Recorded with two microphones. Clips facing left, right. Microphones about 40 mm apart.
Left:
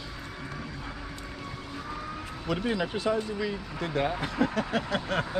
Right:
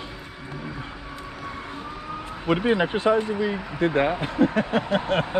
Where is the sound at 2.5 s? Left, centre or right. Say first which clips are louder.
Right 8 dB; right.